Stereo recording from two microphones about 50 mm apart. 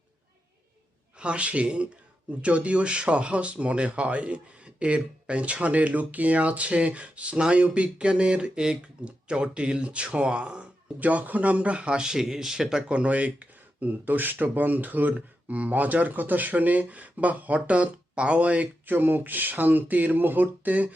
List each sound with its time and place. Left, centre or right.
1.2 s speech: right
12.9 s speech: right
18.9 s speech: right